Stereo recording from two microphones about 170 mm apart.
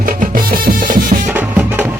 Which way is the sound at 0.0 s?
55° right (ahead or behind).